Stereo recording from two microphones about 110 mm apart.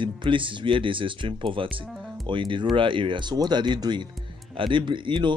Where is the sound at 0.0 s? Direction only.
50° right (ahead or behind).